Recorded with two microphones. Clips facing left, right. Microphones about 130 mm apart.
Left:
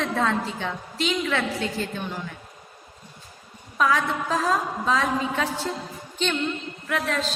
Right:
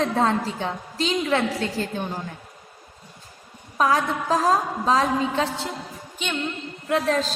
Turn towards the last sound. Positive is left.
turn(degrees=-35)  # may be behind; listen again after turning